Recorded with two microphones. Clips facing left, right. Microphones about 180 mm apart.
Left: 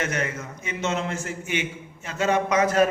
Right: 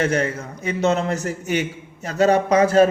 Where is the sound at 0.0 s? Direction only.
30° right (ahead or behind).